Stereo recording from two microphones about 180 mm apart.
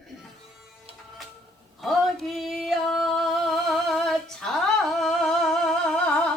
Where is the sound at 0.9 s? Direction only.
30° right (ahead or behind).